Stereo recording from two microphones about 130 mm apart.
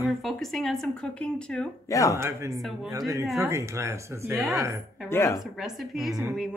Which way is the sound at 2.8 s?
25° right (ahead or behind).